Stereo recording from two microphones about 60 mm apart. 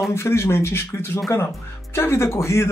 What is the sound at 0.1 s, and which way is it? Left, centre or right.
Speech, left.